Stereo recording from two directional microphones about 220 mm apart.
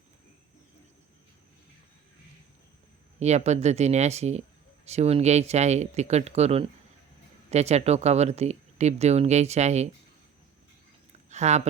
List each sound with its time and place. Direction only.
3.2 s speech: 30° right (ahead or behind)
11.3 s speech: 30° right (ahead or behind)